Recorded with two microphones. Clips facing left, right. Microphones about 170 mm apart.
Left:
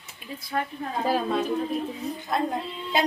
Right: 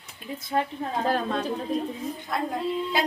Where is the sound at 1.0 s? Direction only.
5° left (ahead or behind).